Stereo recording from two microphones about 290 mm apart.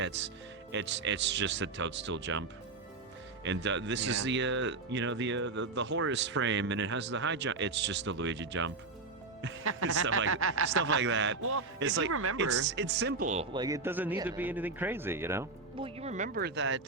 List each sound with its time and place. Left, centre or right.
0.0 s speech: right
3.4 s speech: right; by 15.9 s centre
16.0 s speech: right